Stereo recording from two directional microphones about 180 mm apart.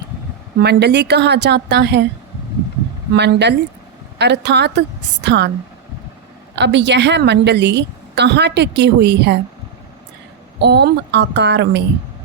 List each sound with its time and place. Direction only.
0.6 s a woman's voice: 65° right (ahead or behind)
3.2 s a woman's voice: 70° right (ahead or behind)
6.6 s a woman's voice: 75° right (ahead or behind)
10.6 s a woman's voice: 70° right (ahead or behind)